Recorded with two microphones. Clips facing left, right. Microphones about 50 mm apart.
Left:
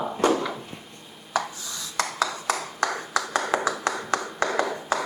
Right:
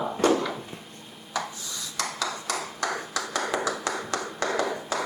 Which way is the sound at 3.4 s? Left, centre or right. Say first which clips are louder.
Left 2 dB; centre.